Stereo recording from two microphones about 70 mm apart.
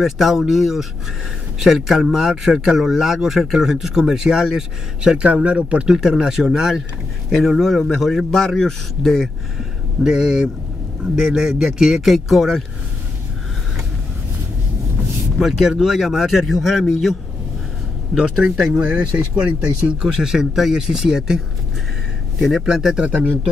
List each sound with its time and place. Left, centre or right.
0.0 s speech: centre
15.3 s speech: centre
18.7 s speech: right; by 21.4 s centre
22.4 s speech: centre